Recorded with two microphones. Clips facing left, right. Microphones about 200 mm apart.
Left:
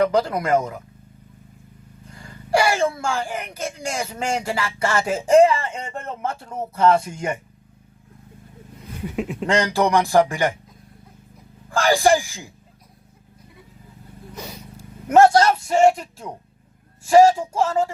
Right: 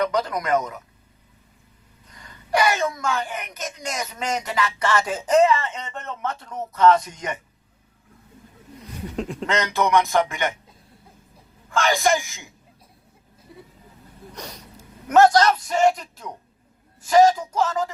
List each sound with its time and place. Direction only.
0.0 s speech: 30° left (ahead or behind)
2.0 s speech: 30° left (ahead or behind)
9.1 s speech: 5° left (ahead or behind)
9.5 s speech: 30° left (ahead or behind)
11.7 s speech: 35° left (ahead or behind)
14.3 s vehicle: 5° left (ahead or behind)
15.0 s speech: 30° left (ahead or behind)